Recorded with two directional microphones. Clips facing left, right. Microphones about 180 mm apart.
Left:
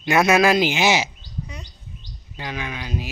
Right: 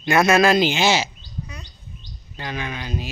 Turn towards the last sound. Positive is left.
turn(degrees=5)  # may be behind; listen again after turning